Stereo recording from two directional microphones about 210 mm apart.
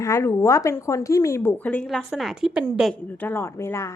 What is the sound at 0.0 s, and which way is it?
Speech, 15° left (ahead or behind).